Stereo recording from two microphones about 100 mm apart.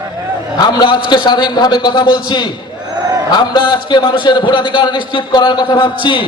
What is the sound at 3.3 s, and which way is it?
Speech, 50° left (ahead or behind).